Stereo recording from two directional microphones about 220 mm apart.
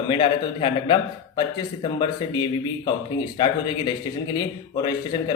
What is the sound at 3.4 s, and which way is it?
Speech, 20° left (ahead or behind).